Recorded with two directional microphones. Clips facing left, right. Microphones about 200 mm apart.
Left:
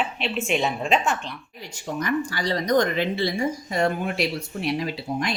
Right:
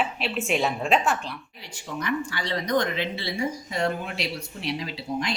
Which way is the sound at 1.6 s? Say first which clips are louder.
Left 4 dB; 45° left (ahead or behind).